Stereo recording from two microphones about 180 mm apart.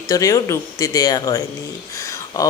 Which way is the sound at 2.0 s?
20° left (ahead or behind).